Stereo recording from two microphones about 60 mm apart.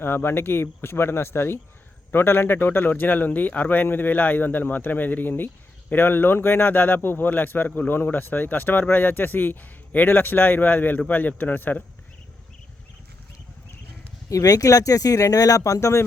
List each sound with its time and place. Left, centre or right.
0.0 s a man's voice: left
14.3 s speech: left